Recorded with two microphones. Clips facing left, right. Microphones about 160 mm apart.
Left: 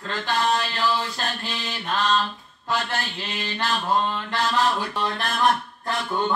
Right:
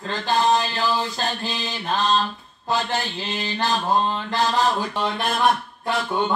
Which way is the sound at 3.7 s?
30° right (ahead or behind).